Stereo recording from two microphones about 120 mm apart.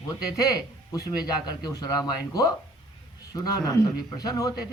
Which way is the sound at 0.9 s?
35° left (ahead or behind).